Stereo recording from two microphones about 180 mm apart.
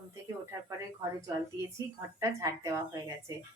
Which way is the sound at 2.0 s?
15° right (ahead or behind).